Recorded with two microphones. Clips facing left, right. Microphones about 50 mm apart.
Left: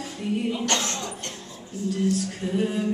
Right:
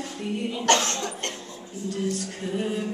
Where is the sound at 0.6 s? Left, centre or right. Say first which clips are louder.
Right 4 dB; right.